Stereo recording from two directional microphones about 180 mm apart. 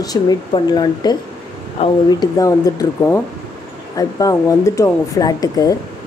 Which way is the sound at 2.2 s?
20° left (ahead or behind).